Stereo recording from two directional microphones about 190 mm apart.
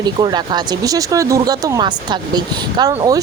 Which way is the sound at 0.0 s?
20° right (ahead or behind).